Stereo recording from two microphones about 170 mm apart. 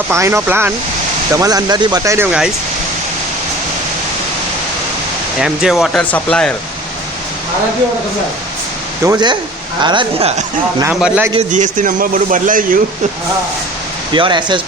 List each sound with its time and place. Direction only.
0.1 s speech: 15° right (ahead or behind)
5.4 s speech: 5° right (ahead or behind)
9.0 s speech: 25° right (ahead or behind)
10.8 s speech: 10° right (ahead or behind)
11.5 s speech: 50° right (ahead or behind)
14.1 s speech: 25° right (ahead or behind)